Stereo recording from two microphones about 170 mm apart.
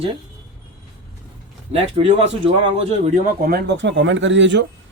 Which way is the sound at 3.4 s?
65° right (ahead or behind).